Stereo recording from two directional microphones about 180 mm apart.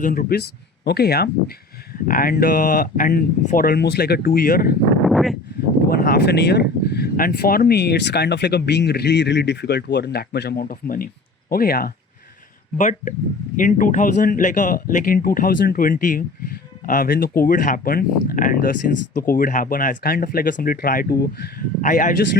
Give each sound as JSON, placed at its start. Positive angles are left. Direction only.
{"t": 0.0, "sound": "speech", "side_deg": 50}
{"t": 5.0, "sound": "a sound", "side_deg": 0}
{"t": 5.9, "sound": "speech", "side_deg": 55}
{"t": 12.7, "sound": "speech", "side_deg": 45}